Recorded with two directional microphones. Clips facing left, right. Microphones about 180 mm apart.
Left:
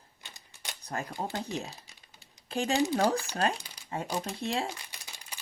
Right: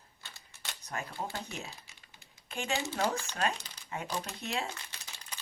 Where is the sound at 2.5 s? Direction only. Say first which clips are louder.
Left 8 dB; 35° left (ahead or behind).